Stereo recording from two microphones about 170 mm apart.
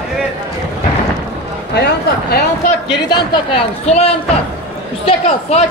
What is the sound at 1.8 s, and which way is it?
Speech, 65° left (ahead or behind).